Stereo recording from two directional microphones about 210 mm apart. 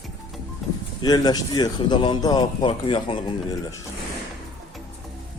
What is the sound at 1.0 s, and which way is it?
Speech, 20° left (ahead or behind).